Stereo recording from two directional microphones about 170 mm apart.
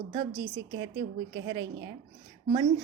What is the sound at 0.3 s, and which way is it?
A woman's voice, 90° right.